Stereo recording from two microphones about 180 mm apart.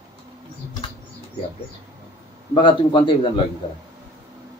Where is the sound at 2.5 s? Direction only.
25° left (ahead or behind).